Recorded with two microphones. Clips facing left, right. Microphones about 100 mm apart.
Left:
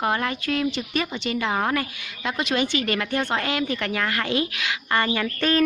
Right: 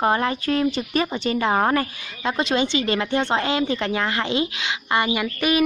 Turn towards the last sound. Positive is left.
turn(degrees=-15)  # may be behind; listen again after turning